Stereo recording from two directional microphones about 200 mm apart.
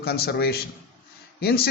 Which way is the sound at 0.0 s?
50° left (ahead or behind).